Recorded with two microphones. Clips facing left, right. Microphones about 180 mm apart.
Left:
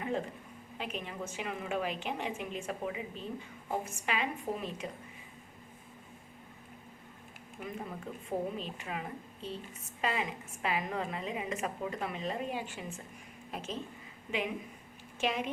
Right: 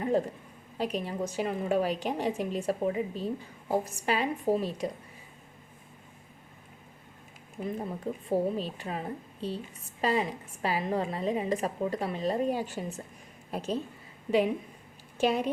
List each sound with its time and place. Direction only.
0.0 s a sound: 40° right (ahead or behind)
0.8 s a woman's voice: 40° right (ahead or behind)
8.3 s a woman's voice: 35° right (ahead or behind)